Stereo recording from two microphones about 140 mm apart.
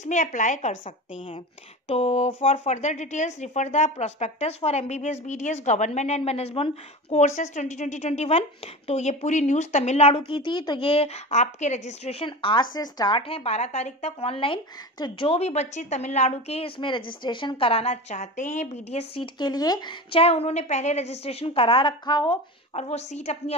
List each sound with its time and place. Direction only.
0.0 s speech: 65° left (ahead or behind)
1.9 s a woman's voice: 50° left (ahead or behind); by 13.2 s 30° left (ahead or behind)
13.3 s a woman's voice: 50° left (ahead or behind)
19.3 s speech: 30° left (ahead or behind)
20.1 s a woman's voice: 45° left (ahead or behind)
22.8 s a woman's voice: 50° left (ahead or behind)